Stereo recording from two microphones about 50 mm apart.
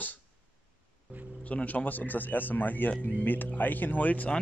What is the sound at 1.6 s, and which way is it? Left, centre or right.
Speech, left.